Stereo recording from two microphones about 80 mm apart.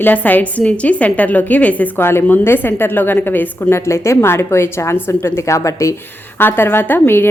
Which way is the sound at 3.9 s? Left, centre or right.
Left.